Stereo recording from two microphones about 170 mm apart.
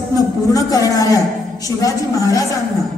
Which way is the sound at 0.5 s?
20° left (ahead or behind).